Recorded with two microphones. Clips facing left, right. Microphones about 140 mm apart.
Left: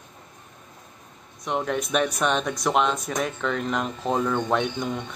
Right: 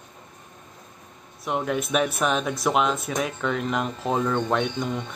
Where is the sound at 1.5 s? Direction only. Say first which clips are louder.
Even; 5° right (ahead or behind).